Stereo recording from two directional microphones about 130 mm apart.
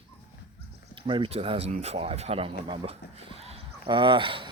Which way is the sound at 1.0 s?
40° right (ahead or behind).